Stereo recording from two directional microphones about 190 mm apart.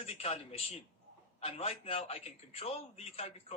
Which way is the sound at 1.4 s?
30° left (ahead or behind).